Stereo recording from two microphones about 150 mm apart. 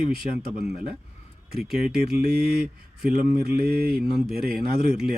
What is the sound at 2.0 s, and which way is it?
Mantra, 90° right.